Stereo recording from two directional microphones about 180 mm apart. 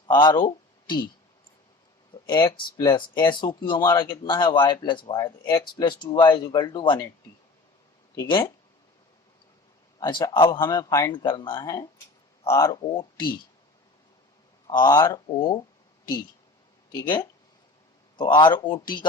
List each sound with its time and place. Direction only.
0.1 s speech: 25° left (ahead or behind)
2.1 s speech: 25° left (ahead or behind)
8.1 s speech: 20° left (ahead or behind)
10.0 s speech: 20° left (ahead or behind)
12.9 s speech: 30° left (ahead or behind)
14.7 s speech: 25° left (ahead or behind)
16.9 s speech: 25° left (ahead or behind)